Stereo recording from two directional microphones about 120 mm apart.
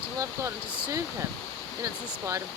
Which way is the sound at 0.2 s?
25° right (ahead or behind).